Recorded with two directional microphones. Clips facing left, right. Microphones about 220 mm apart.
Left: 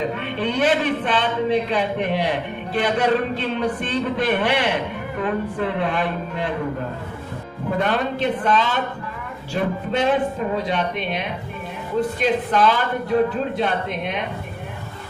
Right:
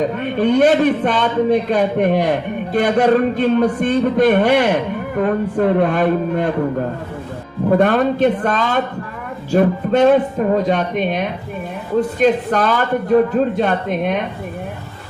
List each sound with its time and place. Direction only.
0.2 s a man's voice: 45° right (ahead or behind)
7.8 s a man's voice: 50° right (ahead or behind)